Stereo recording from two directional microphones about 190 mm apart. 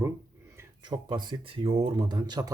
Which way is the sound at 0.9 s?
25° right (ahead or behind).